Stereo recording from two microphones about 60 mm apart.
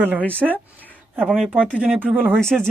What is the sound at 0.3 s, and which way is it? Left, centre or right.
Speech, right.